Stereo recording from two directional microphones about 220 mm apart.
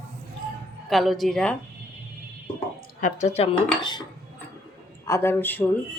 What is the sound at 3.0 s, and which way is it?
Dishes, 30° left (ahead or behind).